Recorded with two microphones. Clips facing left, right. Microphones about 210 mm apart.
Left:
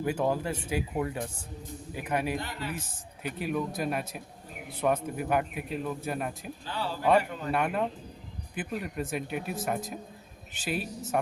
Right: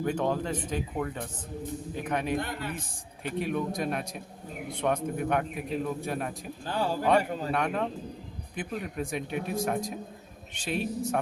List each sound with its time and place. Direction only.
0.0 s speech: 5° left (ahead or behind)
2.4 s a man's voice: 55° right (ahead or behind)
3.2 s a man's voice: centre (ahead or behind)
6.7 s a man's voice: 45° right (ahead or behind)
7.2 s a man's voice: 35° right (ahead or behind)
7.5 s a man's voice: 5° left (ahead or behind)